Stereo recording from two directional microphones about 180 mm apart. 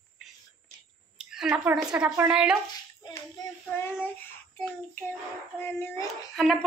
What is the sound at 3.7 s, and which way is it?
Child singing, 15° left (ahead or behind).